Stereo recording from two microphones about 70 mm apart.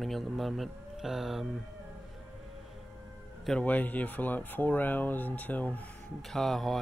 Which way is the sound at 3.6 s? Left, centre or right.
Left.